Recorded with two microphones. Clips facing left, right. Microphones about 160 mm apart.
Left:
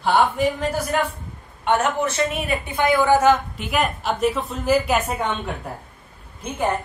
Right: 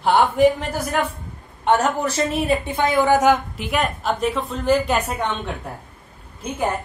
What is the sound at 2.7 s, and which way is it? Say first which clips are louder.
Speech: left 3 dB; 25° right (ahead or behind).